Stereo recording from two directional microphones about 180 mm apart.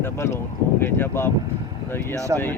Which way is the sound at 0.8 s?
15° left (ahead or behind).